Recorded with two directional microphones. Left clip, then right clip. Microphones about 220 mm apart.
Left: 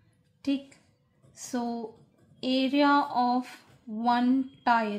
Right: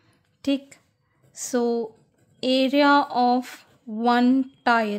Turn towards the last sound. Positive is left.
turn(degrees=-45)  # may be behind; listen again after turning